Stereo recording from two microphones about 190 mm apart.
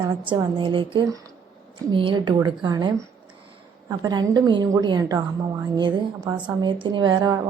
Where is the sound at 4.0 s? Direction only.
20° right (ahead or behind).